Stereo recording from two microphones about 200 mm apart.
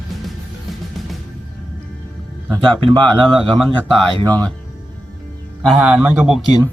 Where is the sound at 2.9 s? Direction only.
25° right (ahead or behind).